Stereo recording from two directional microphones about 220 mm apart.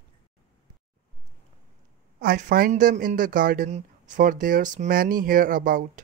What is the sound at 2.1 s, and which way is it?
Speech, 40° right (ahead or behind).